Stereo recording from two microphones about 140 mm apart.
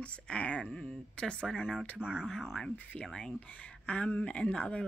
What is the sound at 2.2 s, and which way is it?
Speech, centre (ahead or behind).